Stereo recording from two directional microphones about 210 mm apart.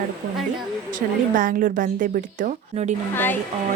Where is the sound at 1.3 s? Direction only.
40° right (ahead or behind).